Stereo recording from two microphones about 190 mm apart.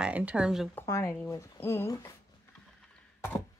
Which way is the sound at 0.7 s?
15° left (ahead or behind).